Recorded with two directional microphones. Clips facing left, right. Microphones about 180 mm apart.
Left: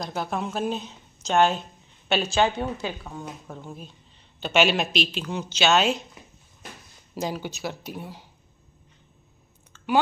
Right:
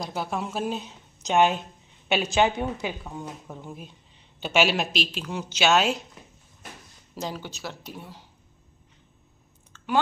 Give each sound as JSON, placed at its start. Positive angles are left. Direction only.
{"t": 0.0, "sound": "a woman's voice", "side_deg": -5}
{"t": 7.2, "sound": "speech", "side_deg": 10}